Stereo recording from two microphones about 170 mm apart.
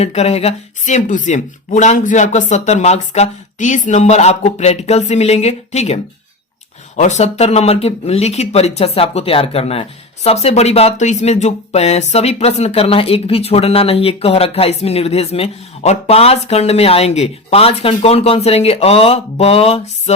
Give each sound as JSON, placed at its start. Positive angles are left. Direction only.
{"t": 0.0, "sound": "speech", "side_deg": 40}